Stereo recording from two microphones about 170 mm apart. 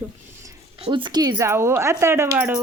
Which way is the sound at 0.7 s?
30° right (ahead or behind).